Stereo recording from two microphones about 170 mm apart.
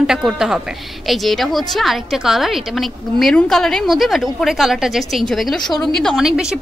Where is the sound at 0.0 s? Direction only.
5° right (ahead or behind).